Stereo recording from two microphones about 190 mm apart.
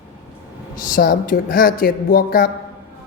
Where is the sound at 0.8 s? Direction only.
50° left (ahead or behind).